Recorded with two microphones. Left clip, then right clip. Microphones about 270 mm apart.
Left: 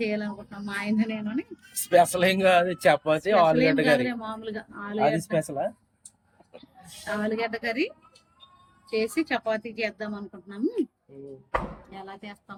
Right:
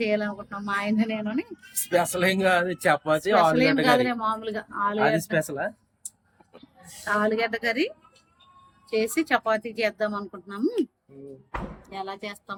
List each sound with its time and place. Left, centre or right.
0.0 s a man's voice: centre
1.9 s speech: centre
3.5 s a man's voice: centre
5.2 s speech: centre
7.1 s a man's voice: centre
11.8 s speech: right